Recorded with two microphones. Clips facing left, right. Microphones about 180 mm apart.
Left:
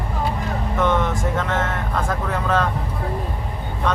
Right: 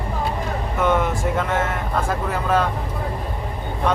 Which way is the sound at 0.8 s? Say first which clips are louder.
Right 1 dB; 10° right (ahead or behind).